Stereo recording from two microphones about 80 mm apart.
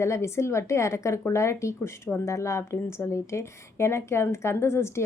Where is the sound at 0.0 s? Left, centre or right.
Left.